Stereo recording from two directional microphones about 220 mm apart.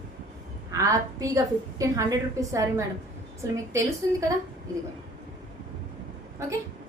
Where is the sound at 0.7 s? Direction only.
15° right (ahead or behind).